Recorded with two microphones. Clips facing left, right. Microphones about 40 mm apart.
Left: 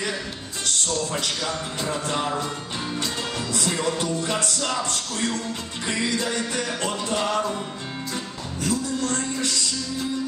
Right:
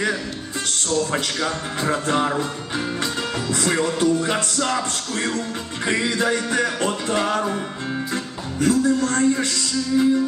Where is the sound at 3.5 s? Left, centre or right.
Right.